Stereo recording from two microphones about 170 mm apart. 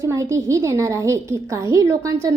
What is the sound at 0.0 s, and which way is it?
A woman's voice, 20° right (ahead or behind).